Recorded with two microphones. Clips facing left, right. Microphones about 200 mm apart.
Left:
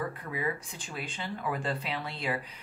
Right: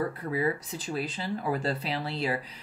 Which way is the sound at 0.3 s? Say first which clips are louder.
Right 5 dB; 35° right (ahead or behind).